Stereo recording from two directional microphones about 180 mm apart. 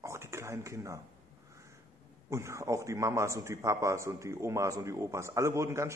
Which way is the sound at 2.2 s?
15° right (ahead or behind).